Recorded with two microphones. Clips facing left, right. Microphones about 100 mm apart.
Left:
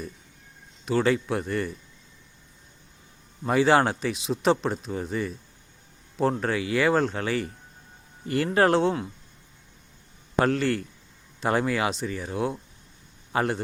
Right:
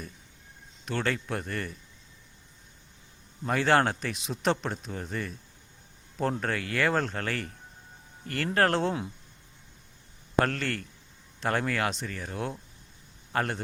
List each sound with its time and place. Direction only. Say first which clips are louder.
0.9 s speech: left 7 dB; 5° left (ahead or behind)
3.4 s speech: left 4 dB; 5° left (ahead or behind)
8.5 s speech: left 4 dB; 5° left (ahead or behind)
10.4 s speech: left 6 dB; 5° left (ahead or behind)